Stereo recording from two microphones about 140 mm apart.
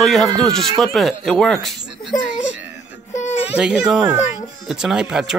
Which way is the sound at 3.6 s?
5° right (ahead or behind).